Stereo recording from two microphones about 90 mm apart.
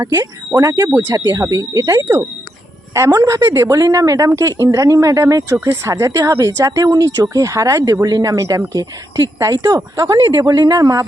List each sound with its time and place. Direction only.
0.1 s speech: 40° right (ahead or behind)
0.9 s speech: 20° right (ahead or behind)
1.3 s speech: 40° right (ahead or behind)